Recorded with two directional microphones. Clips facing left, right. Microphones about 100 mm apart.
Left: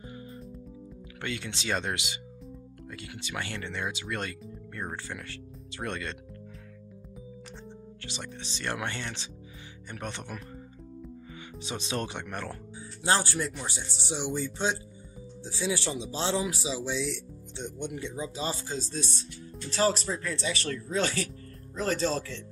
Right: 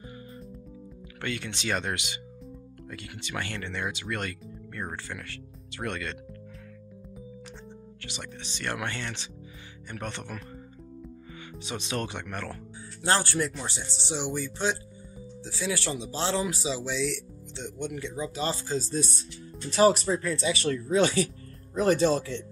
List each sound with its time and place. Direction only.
1.2 s speech: 20° left (ahead or behind)
3.3 s speech: 15° left (ahead or behind)
8.0 s speech: 25° left (ahead or behind)
11.6 s speech: 25° left (ahead or behind); by 14.1 s 5° left (ahead or behind)
14.2 s speech: 25° left (ahead or behind)
16.4 s speech: 5° left (ahead or behind)
17.7 s speech: 20° left (ahead or behind)
18.5 s speech: centre (ahead or behind)